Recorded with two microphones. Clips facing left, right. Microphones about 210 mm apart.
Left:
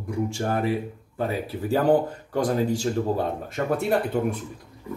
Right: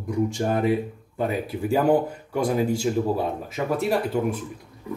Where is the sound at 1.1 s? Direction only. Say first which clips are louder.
Right 2 dB; 15° right (ahead or behind).